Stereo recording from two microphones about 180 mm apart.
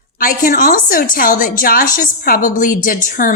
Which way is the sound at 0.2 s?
50° left (ahead or behind).